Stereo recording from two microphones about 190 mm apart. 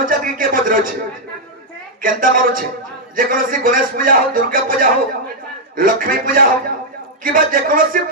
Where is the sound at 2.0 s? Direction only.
45° right (ahead or behind).